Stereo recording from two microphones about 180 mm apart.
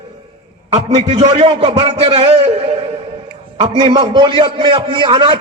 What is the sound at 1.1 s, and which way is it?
A man's voice, 25° right (ahead or behind).